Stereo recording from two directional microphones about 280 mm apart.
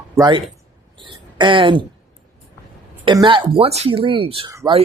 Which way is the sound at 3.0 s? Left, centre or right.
Centre.